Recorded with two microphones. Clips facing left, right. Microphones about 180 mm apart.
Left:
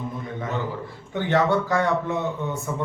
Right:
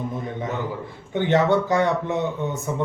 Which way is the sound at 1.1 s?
20° right (ahead or behind).